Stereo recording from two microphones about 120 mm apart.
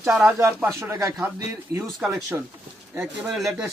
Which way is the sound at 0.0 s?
5° right (ahead or behind).